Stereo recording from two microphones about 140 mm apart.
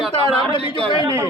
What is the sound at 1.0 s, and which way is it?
Speech, 20° right (ahead or behind).